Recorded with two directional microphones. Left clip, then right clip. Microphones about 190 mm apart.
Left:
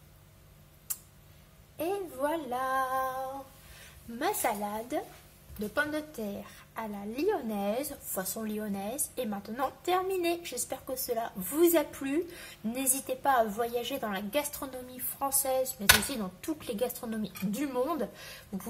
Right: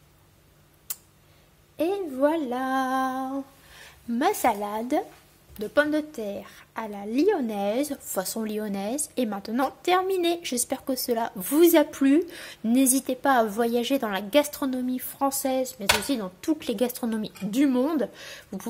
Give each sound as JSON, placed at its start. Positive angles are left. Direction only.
{"t": 1.8, "sound": "a woman's voice", "side_deg": -45}
{"t": 3.8, "sound": "a woman's voice", "side_deg": -35}
{"t": 5.8, "sound": "a woman's voice", "side_deg": -50}